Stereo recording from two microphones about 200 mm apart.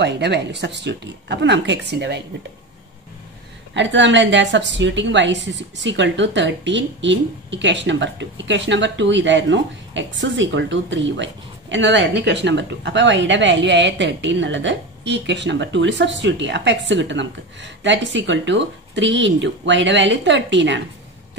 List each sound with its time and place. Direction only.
0.0 s speech: 60° right (ahead or behind)
3.7 s speech: 65° right (ahead or behind)